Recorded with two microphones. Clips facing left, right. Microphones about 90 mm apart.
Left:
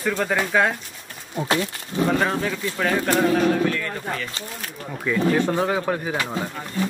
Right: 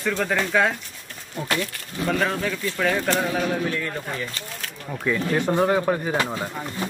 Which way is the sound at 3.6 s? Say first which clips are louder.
Left 3 dB; 20° right (ahead or behind).